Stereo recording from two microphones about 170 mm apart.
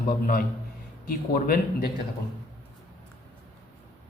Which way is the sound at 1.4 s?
65° left (ahead or behind).